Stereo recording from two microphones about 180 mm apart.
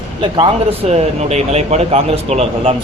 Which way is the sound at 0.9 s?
35° right (ahead or behind).